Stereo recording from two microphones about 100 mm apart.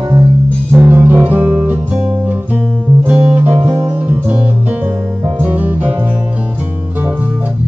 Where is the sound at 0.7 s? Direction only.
20° right (ahead or behind).